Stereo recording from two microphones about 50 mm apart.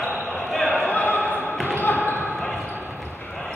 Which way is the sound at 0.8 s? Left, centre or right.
Left.